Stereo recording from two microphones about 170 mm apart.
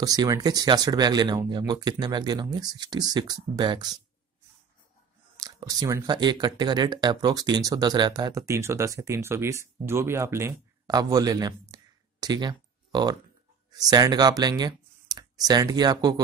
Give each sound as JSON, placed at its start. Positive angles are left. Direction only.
{"t": 0.0, "sound": "speech", "side_deg": -20}
{"t": 5.4, "sound": "speech", "side_deg": -20}